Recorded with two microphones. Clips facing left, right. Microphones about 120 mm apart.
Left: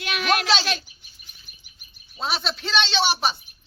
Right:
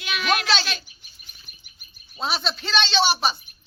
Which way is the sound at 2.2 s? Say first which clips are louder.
Right 1 dB; centre (ahead or behind).